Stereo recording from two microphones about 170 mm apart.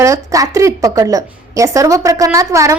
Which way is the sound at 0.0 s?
20° right (ahead or behind).